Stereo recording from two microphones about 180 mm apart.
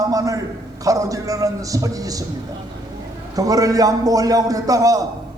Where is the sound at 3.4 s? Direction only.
20° right (ahead or behind).